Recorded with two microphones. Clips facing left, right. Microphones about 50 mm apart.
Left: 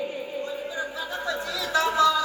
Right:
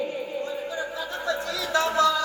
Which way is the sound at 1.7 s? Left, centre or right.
Centre.